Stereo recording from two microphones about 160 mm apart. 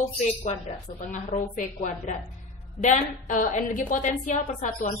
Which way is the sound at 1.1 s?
50° left (ahead or behind).